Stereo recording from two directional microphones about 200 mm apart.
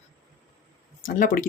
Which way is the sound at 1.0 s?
40° left (ahead or behind).